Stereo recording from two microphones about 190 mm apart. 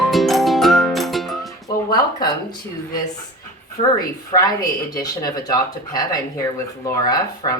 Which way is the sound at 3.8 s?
35° left (ahead or behind).